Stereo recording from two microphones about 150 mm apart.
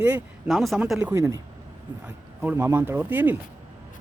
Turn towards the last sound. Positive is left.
turn(degrees=-15)  # may be behind; listen again after turning